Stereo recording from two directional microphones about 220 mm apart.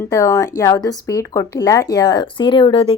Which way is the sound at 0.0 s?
15° left (ahead or behind).